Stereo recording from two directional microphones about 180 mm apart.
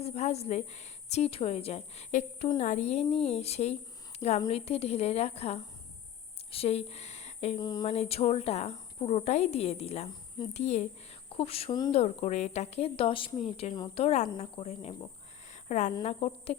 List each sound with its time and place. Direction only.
0.0 s a woman's voice: 35° left (ahead or behind)
7.6 s a sound: 20° left (ahead or behind)
7.9 s a woman's voice: 35° left (ahead or behind)
10.5 s a woman's voice: 40° left (ahead or behind)
11.9 s a woman's voice: 40° left (ahead or behind)
14.3 s a woman's voice: 30° left (ahead or behind)